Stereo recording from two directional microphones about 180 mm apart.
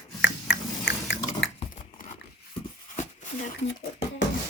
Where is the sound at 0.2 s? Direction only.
90° left.